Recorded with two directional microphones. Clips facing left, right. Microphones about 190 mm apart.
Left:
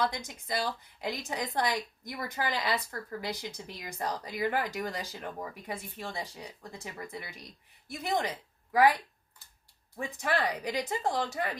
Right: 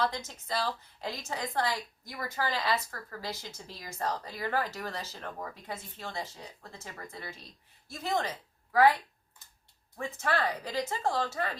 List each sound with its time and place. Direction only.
0.0 s speech: 15° left (ahead or behind)
10.0 s speech: 15° left (ahead or behind)